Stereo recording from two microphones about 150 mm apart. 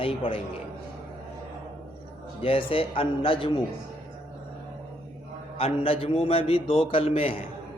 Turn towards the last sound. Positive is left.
turn(degrees=40)  # may be behind; listen again after turning